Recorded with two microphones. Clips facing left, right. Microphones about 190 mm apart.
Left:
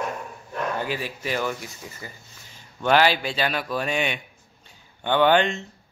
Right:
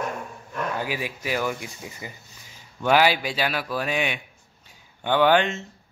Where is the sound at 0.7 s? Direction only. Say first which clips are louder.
Even; 10° right (ahead or behind).